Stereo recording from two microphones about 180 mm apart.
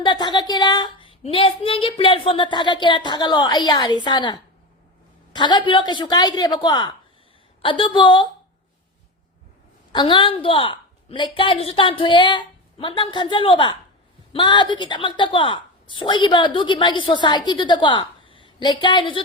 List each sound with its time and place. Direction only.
0.0 s speech: 25° left (ahead or behind)
9.9 s speech: 25° left (ahead or behind)